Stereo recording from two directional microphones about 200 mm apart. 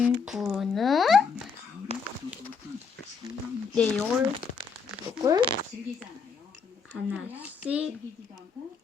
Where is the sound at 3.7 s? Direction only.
5° left (ahead or behind).